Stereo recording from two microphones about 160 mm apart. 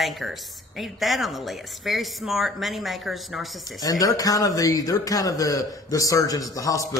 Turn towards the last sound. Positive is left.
turn(degrees=20)  # may be behind; listen again after turning